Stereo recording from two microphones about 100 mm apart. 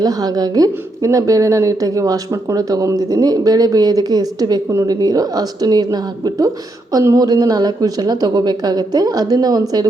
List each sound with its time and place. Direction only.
0.0 s speech: 40° right (ahead or behind)